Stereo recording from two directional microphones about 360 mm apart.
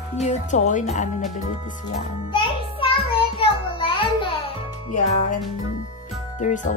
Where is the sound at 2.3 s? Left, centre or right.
Centre.